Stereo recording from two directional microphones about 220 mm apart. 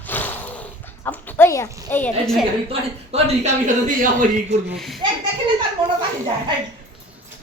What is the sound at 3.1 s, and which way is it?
A man's voice, 30° right (ahead or behind).